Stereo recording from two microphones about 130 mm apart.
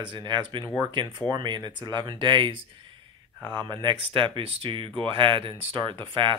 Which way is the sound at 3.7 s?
35° right (ahead or behind).